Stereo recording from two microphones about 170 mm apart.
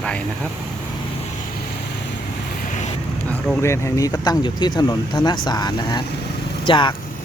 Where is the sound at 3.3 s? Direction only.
10° left (ahead or behind); by 6.9 s 30° left (ahead or behind).